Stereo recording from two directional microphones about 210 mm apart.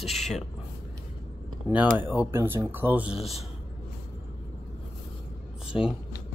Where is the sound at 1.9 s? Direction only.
10° right (ahead or behind).